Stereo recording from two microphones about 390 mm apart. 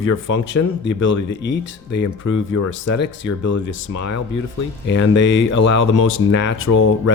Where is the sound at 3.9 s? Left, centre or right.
Left.